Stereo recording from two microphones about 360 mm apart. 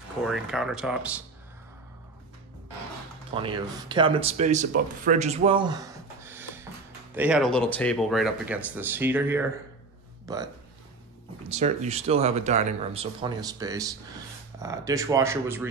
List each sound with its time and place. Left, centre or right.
0.2 s speech: centre
3.3 s speech: centre